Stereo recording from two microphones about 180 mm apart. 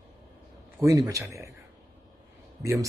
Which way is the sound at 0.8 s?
15° right (ahead or behind).